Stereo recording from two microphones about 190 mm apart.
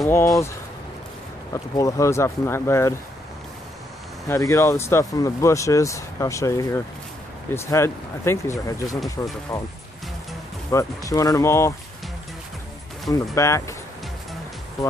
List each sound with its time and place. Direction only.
0.0 s speech: 15° left (ahead or behind)
1.5 s speech: 15° left (ahead or behind)
4.3 s speech: 15° left (ahead or behind)
10.7 s speech: 15° left (ahead or behind)
13.1 s speech: 15° left (ahead or behind)